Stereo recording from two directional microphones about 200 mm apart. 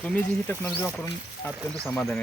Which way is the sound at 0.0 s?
5° left (ahead or behind).